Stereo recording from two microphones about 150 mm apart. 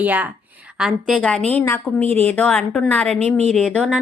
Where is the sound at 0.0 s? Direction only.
10° right (ahead or behind).